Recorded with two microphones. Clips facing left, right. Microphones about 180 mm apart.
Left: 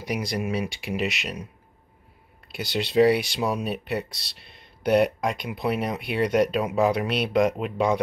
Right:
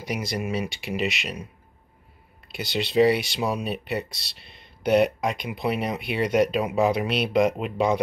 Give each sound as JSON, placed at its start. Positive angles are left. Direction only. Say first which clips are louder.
{"t": 0.0, "sound": "speech", "louder": "left 1 dB", "side_deg": -5}